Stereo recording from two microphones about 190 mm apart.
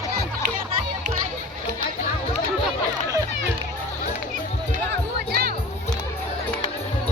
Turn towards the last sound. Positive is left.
turn(degrees=-55)  # may be behind; listen again after turning